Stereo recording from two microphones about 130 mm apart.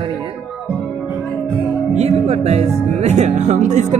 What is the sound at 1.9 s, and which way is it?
Music, 55° right (ahead or behind).